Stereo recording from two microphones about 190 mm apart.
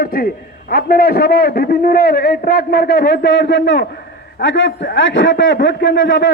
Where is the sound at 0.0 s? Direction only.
50° left (ahead or behind).